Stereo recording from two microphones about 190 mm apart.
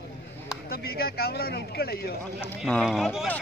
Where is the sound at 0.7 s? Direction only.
55° left (ahead or behind).